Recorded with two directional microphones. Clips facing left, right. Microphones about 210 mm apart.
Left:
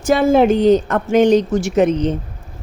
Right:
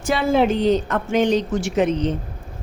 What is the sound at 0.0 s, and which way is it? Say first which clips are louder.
Speech: left 5 dB; 45° left (ahead or behind).